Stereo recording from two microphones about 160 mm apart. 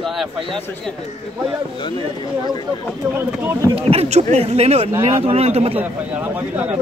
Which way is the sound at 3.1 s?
15° right (ahead or behind).